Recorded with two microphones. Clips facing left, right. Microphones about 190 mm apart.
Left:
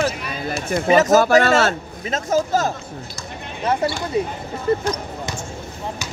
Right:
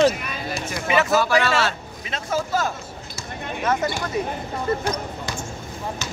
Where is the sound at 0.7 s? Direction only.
40° left (ahead or behind).